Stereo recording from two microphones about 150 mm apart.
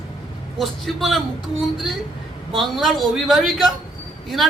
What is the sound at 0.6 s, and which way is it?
Speech, centre (ahead or behind).